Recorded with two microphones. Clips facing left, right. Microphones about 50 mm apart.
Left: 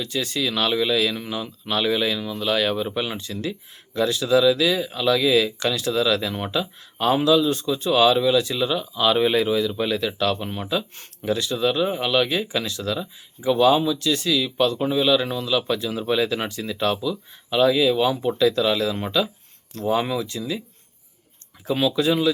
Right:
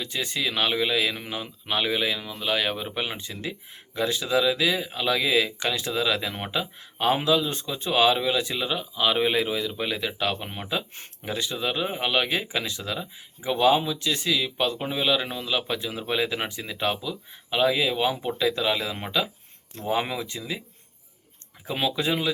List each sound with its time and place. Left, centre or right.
0.0 s speech: right
21.7 s speech: right